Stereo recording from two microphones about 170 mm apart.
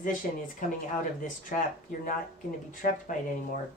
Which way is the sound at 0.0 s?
50° left (ahead or behind).